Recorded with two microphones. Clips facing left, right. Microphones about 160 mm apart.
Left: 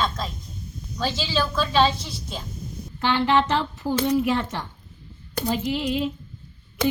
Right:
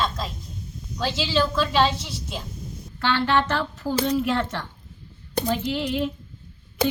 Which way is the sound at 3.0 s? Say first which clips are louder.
Left 1 dB; 15° left (ahead or behind).